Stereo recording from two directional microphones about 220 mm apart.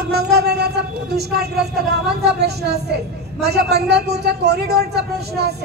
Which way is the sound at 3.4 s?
50° right (ahead or behind).